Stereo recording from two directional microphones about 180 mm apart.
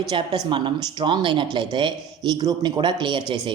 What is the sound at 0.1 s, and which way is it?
Speech, 25° right (ahead or behind).